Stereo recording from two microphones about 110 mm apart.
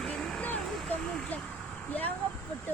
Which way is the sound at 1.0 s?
5° left (ahead or behind).